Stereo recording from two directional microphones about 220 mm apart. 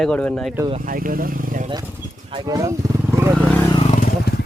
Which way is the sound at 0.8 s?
40° right (ahead or behind).